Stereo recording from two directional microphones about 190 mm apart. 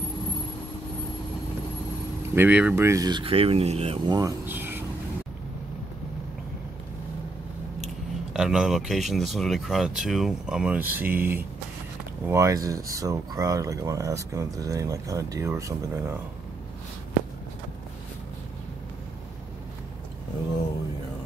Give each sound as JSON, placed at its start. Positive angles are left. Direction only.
{"t": 2.3, "sound": "speech", "side_deg": -10}
{"t": 4.1, "sound": "speech", "side_deg": -15}
{"t": 7.8, "sound": "speech", "side_deg": 0}